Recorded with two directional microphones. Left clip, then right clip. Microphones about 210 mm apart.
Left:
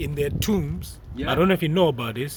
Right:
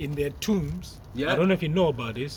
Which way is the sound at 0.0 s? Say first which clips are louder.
Left 3 dB; 45° left (ahead or behind).